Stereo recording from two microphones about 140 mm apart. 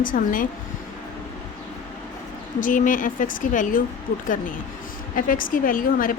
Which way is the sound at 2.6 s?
70° left (ahead or behind).